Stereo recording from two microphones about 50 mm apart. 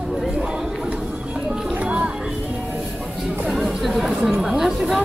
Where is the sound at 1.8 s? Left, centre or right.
Right.